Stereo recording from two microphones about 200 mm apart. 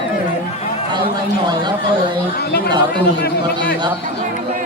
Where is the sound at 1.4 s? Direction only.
20° right (ahead or behind).